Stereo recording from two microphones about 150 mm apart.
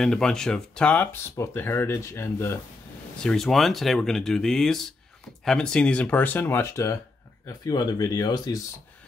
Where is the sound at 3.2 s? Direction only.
5° left (ahead or behind); by 8.5 s 25° left (ahead or behind).